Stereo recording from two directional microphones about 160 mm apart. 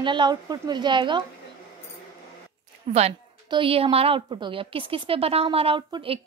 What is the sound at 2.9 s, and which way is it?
A woman's voice, 40° right (ahead or behind).